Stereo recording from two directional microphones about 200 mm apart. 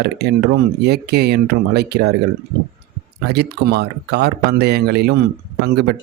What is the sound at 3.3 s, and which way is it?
Speech, 55° right (ahead or behind).